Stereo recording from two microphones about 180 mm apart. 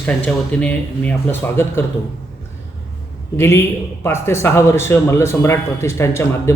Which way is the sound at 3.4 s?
15° left (ahead or behind).